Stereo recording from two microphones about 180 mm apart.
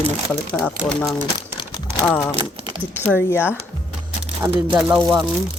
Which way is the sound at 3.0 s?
10° left (ahead or behind).